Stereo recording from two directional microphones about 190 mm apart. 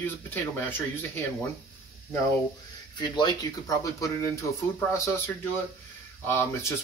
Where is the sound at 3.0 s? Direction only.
20° left (ahead or behind).